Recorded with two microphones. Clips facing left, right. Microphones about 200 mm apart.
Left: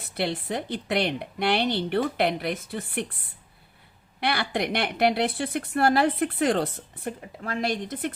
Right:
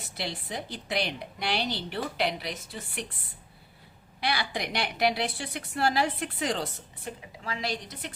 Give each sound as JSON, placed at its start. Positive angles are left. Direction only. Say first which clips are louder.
{"t": 0.1, "sound": "a woman's voice", "louder": "left 8 dB", "side_deg": 60}
{"t": 4.2, "sound": "a woman's voice", "louder": "left 4 dB", "side_deg": 60}